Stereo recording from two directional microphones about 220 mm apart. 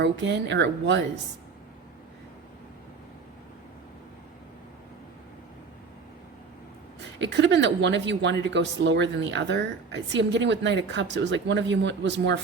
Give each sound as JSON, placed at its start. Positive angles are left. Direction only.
{"t": 0.0, "sound": "a woman's voice", "side_deg": -55}
{"t": 7.2, "sound": "a woman's voice", "side_deg": -55}